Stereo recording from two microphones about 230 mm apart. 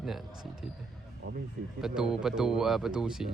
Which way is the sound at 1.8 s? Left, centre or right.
Centre.